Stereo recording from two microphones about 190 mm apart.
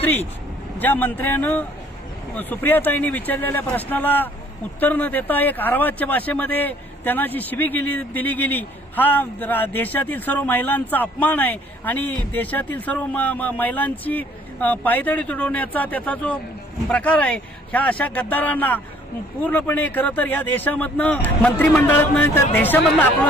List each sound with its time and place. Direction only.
0.7 s speech: 10° left (ahead or behind)